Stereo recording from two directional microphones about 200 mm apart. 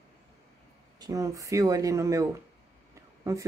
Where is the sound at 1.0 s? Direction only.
15° right (ahead or behind).